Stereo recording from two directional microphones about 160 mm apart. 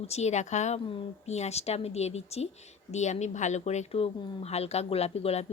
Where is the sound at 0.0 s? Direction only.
40° left (ahead or behind).